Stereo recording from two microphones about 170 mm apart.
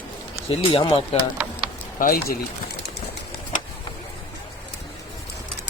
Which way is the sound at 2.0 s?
60° left (ahead or behind).